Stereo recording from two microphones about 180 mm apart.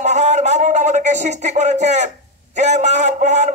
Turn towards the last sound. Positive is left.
turn(degrees=-40)  # may be behind; listen again after turning